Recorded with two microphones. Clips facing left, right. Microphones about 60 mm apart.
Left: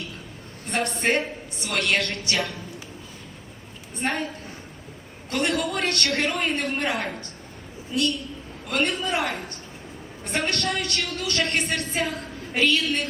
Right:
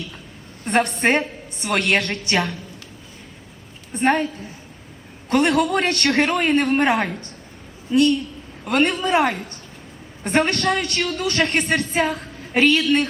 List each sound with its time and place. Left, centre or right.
0.6 s a woman's voice: right
1.1 s a woman's voice: right
1.9 s a woman's voice: right
3.9 s a woman's voice: right
5.4 s a woman's voice: right
10.6 s a woman's voice: right